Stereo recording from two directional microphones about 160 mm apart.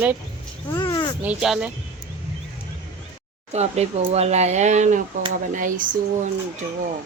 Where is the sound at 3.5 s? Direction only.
40° right (ahead or behind).